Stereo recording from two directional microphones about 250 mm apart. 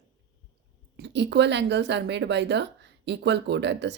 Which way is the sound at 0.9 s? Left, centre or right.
Right.